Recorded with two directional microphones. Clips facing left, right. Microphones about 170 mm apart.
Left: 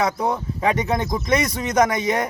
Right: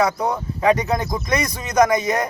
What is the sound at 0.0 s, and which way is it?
Speech, 25° left (ahead or behind).